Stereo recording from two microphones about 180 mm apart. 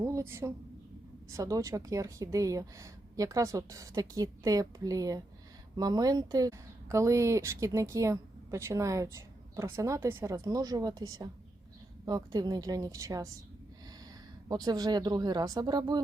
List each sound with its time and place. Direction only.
0.0 s speech: 15° right (ahead or behind)
14.4 s speech: 20° right (ahead or behind)